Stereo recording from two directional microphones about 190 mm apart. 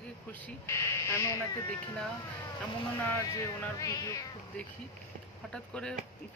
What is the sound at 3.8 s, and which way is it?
Speech, 20° left (ahead or behind).